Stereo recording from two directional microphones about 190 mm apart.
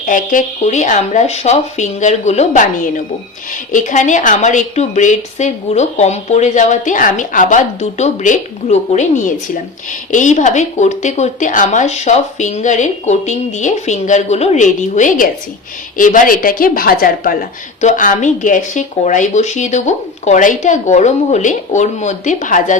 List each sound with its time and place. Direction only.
0.0 s a woman's voice: 45° left (ahead or behind)